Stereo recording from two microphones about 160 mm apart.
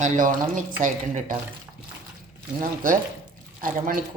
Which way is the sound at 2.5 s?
55° right (ahead or behind).